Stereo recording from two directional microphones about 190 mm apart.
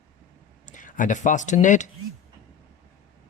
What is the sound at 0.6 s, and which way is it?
Speech, 40° left (ahead or behind).